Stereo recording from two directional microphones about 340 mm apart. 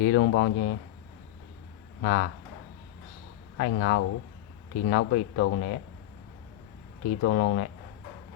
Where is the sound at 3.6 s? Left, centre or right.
Left.